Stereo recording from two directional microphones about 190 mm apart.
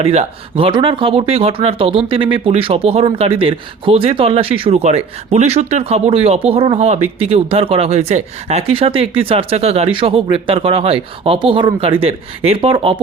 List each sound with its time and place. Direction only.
0.0 s speech: 35° right (ahead or behind)